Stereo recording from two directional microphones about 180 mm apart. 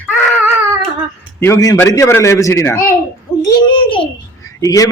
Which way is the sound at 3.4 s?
25° left (ahead or behind).